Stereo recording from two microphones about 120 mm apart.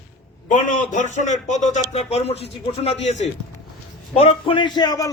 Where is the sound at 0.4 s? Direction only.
90° left.